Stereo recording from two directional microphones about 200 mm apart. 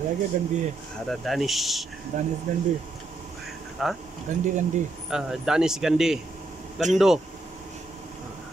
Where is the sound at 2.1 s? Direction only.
40° right (ahead or behind).